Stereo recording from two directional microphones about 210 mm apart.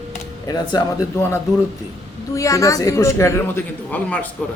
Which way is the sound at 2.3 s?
15° left (ahead or behind).